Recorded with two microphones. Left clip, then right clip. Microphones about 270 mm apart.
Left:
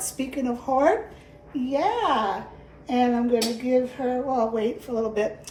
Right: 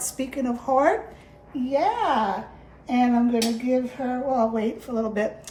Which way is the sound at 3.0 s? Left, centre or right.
Right.